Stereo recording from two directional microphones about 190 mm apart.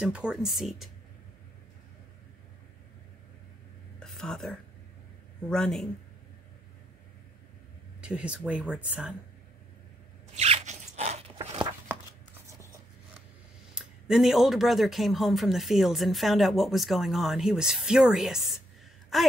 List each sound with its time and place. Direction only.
0.0 s speech: 5° right (ahead or behind)
4.0 s a sound: 5° left (ahead or behind)
5.5 s speech: 5° left (ahead or behind)
8.0 s speech: 5° right (ahead or behind)
10.3 s a sound: 35° right (ahead or behind)
13.7 s speech: centre (ahead or behind)